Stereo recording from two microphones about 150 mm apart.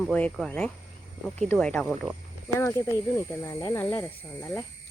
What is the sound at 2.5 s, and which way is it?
Speech, 15° left (ahead or behind).